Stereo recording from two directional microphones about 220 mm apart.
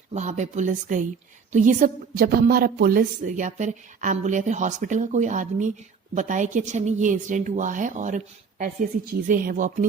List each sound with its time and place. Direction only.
0.1 s a woman's voice: 30° right (ahead or behind)